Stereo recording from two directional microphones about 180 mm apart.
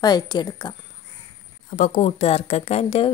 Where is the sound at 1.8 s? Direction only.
40° left (ahead or behind).